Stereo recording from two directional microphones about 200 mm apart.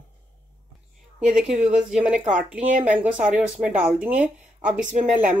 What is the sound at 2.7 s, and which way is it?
Speech, 40° right (ahead or behind).